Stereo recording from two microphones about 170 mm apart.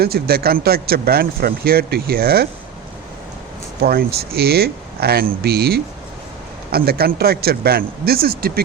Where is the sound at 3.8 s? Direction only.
65° right (ahead or behind).